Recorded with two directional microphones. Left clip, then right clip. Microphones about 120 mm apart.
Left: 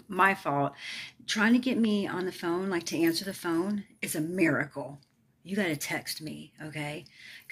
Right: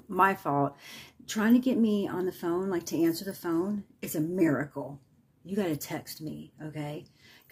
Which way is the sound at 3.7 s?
40° right (ahead or behind).